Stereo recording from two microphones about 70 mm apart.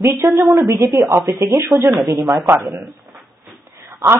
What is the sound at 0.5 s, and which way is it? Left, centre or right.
Speech, right.